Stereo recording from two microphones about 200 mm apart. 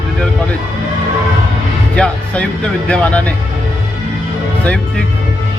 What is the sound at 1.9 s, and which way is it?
Speech, 5° left (ahead or behind).